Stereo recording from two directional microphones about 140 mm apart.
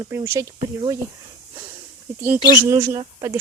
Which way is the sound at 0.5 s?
30° right (ahead or behind).